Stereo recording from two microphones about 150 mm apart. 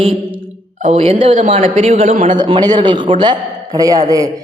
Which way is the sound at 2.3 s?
25° right (ahead or behind).